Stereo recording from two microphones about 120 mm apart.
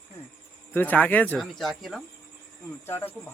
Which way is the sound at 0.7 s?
15° left (ahead or behind).